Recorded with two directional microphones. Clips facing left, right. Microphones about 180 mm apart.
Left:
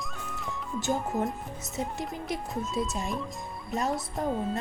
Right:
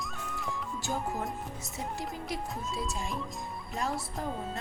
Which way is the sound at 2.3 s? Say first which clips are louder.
Left 7 dB; 20° left (ahead or behind).